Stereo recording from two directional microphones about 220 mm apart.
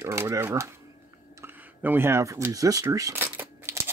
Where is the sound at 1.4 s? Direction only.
10° right (ahead or behind).